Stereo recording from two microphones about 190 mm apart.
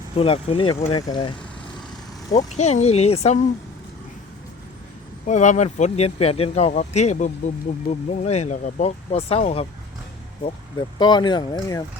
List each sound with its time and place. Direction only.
0.2 s speech: 30° left (ahead or behind)
2.6 s speech: 35° left (ahead or behind)
5.2 s speech: 40° left (ahead or behind); by 11.8 s 25° left (ahead or behind)